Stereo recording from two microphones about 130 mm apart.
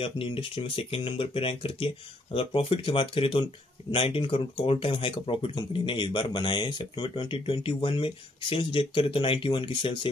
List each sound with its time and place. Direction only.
0.0 s speech: 45° left (ahead or behind)